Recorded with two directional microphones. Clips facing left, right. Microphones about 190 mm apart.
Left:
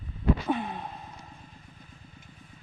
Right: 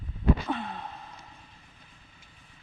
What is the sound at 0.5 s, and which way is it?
Sigh, 15° left (ahead or behind).